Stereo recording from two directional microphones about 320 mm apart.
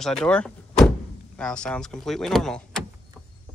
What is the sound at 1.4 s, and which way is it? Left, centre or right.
Speech, centre.